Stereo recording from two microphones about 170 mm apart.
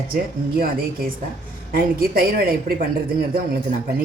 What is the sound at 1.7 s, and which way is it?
A woman's voice, 60° right (ahead or behind).